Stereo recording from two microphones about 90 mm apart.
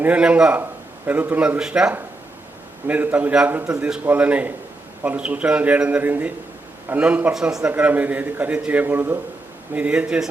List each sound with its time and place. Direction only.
0.0 s a man's voice: 15° right (ahead or behind)
2.8 s a man's voice: 20° right (ahead or behind)